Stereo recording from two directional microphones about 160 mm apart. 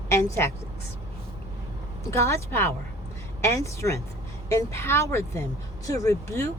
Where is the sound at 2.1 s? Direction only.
15° left (ahead or behind).